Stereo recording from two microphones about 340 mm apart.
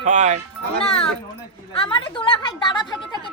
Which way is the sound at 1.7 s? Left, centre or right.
Centre.